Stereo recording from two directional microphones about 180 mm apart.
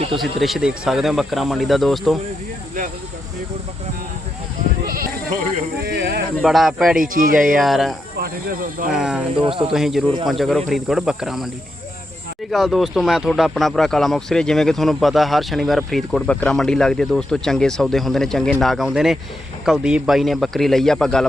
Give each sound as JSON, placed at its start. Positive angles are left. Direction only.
{"t": 0.2, "sound": "speech", "side_deg": 0}
{"t": 5.8, "sound": "speech", "side_deg": -65}
{"t": 6.4, "sound": "speech", "side_deg": 0}
{"t": 7.0, "sound": "speech", "side_deg": -50}
{"t": 7.6, "sound": "speech", "side_deg": 0}
{"t": 9.3, "sound": "speech", "side_deg": -30}
{"t": 9.7, "sound": "speech", "side_deg": 0}
{"t": 12.5, "sound": "speech", "side_deg": 0}